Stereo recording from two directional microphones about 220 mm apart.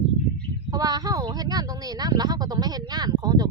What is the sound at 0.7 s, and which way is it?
Speech, 15° right (ahead or behind).